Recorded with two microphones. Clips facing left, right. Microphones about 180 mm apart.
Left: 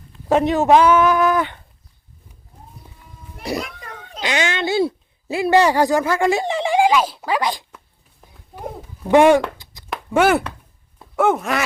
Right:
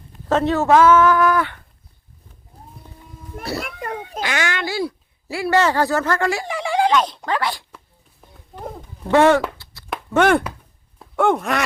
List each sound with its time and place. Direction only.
0.3 s a woman's voice: 15° left (ahead or behind)
2.5 s a sound: 35° right (ahead or behind)
3.4 s a child's voice: 15° left (ahead or behind)
3.8 s children playing: 60° right (ahead or behind)
4.2 s speech: 20° left (ahead or behind)
6.7 s speech: 10° left (ahead or behind)
8.2 s a sound: centre (ahead or behind)
9.0 s a woman's voice: 15° left (ahead or behind)
9.6 s a sound: 15° left (ahead or behind)
10.1 s a woman's voice: 5° left (ahead or behind)